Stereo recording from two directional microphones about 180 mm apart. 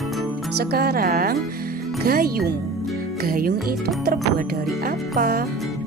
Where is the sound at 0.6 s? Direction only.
65° right (ahead or behind).